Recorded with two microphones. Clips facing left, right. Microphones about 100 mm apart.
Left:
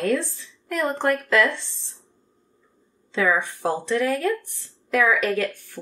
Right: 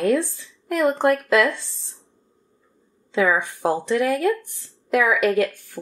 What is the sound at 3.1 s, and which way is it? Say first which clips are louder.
A woman's voice: right 2 dB; 15° right (ahead or behind).